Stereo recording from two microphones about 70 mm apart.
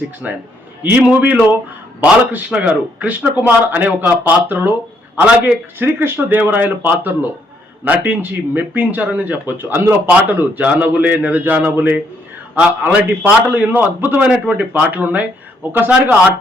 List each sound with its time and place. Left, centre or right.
0.2 s a man's voice: centre
0.8 s a man's voice: right